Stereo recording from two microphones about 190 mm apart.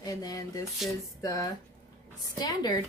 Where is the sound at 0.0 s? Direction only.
20° left (ahead or behind).